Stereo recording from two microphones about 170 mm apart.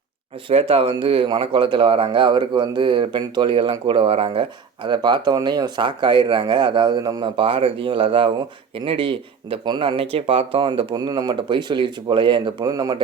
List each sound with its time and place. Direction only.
0.4 s speech: 35° right (ahead or behind)